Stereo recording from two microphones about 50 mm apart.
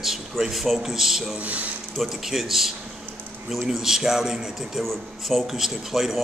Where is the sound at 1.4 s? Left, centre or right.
Right.